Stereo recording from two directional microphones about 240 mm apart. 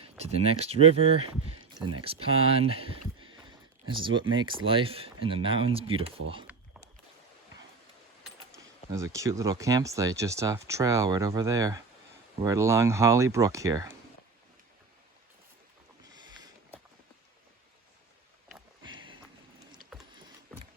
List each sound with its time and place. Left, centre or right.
0.0 s speech: right
6.5 s a sound: centre
9.1 s speech: centre